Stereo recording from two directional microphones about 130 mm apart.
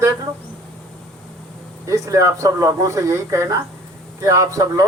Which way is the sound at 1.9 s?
25° right (ahead or behind).